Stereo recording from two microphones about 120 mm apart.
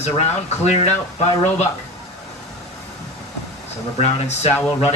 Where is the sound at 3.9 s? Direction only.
65° left (ahead or behind).